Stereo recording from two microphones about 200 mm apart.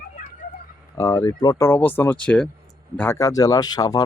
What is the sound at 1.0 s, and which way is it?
Speech, 15° left (ahead or behind).